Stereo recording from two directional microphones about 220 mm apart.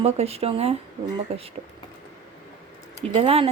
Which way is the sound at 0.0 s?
30° right (ahead or behind).